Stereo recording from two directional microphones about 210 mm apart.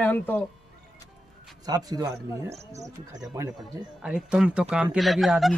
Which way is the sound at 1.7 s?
20° right (ahead or behind).